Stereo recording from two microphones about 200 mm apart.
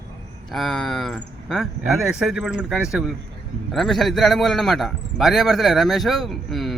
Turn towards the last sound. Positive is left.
turn(degrees=0)  # may be behind; listen again after turning